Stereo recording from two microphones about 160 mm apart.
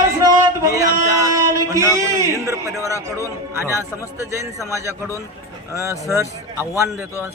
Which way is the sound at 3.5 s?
15° right (ahead or behind).